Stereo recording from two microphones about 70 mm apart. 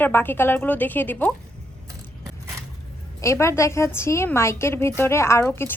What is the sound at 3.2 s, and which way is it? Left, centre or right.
A woman's voice, left.